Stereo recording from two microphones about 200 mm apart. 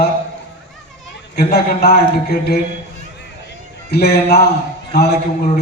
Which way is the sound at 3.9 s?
50° left (ahead or behind).